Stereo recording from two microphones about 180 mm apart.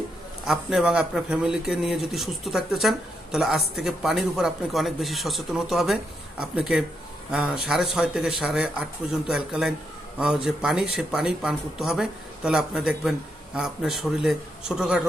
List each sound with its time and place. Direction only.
0.4 s speech: centre (ahead or behind)